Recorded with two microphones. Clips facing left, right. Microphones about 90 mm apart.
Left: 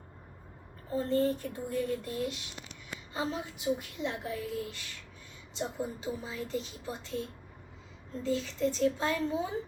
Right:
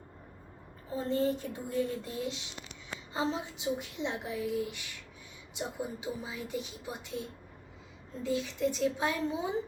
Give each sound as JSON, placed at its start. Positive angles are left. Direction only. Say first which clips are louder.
{"t": 0.9, "sound": "a woman's voice", "louder": "left 2 dB", "side_deg": -20}
{"t": 8.2, "sound": "a woman's voice", "louder": "left 1 dB", "side_deg": -15}